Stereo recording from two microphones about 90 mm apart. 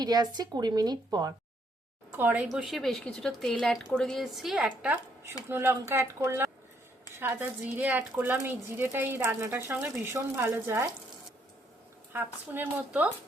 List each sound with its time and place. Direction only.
0.0 s a woman's voice: 50° right (ahead or behind)
2.1 s a woman's voice: 25° right (ahead or behind)
2.6 s speech: centre (ahead or behind)
5.5 s speech: 25° right (ahead or behind)
12.1 s speech: 15° right (ahead or behind)